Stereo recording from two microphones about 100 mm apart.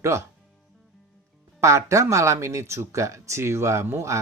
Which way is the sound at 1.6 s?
30° right (ahead or behind).